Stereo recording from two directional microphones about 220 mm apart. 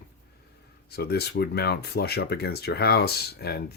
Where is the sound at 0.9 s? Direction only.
45° left (ahead or behind).